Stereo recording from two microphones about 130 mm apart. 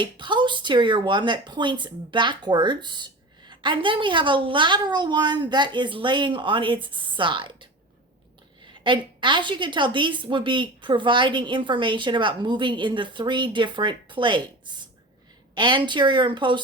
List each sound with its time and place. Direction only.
0.0 s speech: 40° right (ahead or behind)
15.5 s speech: 35° right (ahead or behind)